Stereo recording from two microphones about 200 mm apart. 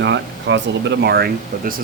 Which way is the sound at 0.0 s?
60° right (ahead or behind).